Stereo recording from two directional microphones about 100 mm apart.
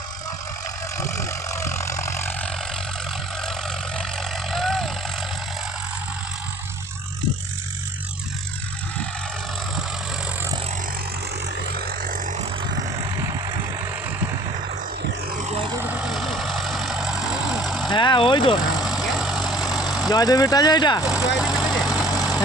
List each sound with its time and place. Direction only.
0.9 s vehicle: 30° left (ahead or behind)
3.4 s vehicle: 5° left (ahead or behind)
13.0 s vehicle: 30° right (ahead or behind)
15.8 s vehicle: 15° right (ahead or behind)
16.0 s vehicle: centre (ahead or behind)
17.8 s vehicle: 50° left (ahead or behind)
18.8 s vehicle: 5° right (ahead or behind)
20.1 s speech: 40° left (ahead or behind)
21.0 s vehicle: 5° right (ahead or behind)